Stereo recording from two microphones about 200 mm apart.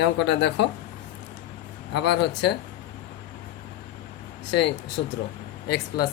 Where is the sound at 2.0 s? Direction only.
60° left (ahead or behind).